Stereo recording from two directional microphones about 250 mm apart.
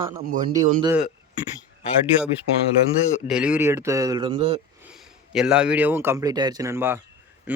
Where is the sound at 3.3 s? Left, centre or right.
Centre.